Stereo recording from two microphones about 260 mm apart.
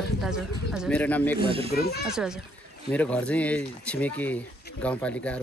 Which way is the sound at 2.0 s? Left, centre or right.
Centre.